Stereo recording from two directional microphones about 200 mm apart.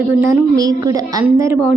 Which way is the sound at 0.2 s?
15° right (ahead or behind).